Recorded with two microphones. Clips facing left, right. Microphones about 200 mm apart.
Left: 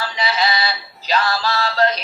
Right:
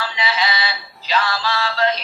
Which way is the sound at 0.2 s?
40° left (ahead or behind).